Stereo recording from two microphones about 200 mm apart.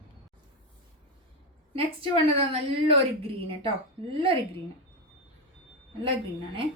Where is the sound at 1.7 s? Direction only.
25° right (ahead or behind).